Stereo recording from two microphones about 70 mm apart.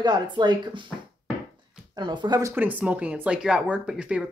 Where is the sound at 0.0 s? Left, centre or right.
Right.